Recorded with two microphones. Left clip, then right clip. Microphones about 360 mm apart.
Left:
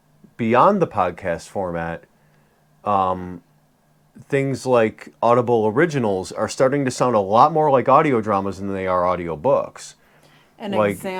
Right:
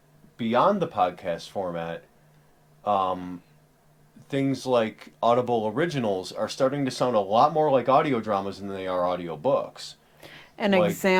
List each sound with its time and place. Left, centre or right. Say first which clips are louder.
0.3 s speech: left 7 dB; left
10.2 s a sound: right 5 dB; right
11.0 s speech: right 6 dB; right